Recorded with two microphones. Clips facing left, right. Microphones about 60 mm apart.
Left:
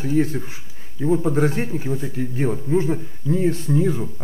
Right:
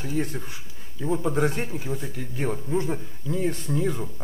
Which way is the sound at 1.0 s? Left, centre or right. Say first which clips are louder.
Left 6 dB; centre.